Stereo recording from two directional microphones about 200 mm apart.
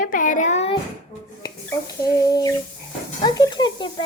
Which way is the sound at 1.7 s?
15° left (ahead or behind).